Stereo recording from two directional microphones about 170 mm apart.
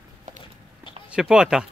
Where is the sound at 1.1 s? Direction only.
5° right (ahead or behind).